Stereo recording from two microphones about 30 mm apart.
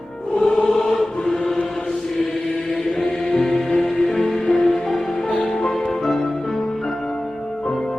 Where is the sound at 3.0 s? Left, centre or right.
Centre.